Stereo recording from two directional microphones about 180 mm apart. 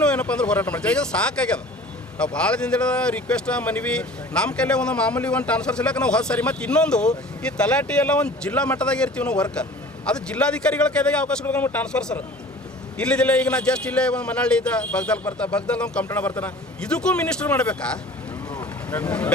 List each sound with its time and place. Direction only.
0.0 s speech: 5° left (ahead or behind)